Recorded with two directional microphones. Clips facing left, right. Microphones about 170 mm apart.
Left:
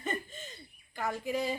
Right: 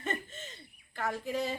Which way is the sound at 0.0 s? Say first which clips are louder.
Even; 10° left (ahead or behind).